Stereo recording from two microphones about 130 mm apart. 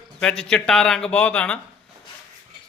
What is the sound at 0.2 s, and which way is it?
A man's voice, 5° left (ahead or behind).